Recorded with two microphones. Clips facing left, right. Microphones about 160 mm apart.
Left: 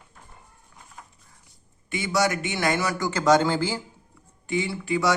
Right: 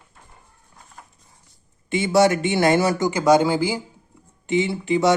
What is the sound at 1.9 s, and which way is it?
Speech, 25° right (ahead or behind).